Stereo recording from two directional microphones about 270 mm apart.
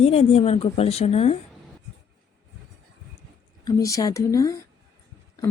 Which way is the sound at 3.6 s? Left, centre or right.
Centre.